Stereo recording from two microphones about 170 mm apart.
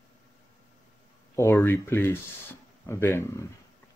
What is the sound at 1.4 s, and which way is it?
Speech, 15° left (ahead or behind).